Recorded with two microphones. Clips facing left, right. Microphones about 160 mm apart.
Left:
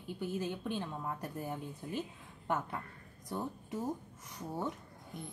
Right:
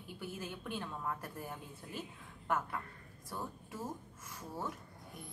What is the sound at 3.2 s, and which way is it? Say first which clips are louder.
A woman's voice: left 5 dB; 20° left (ahead or behind).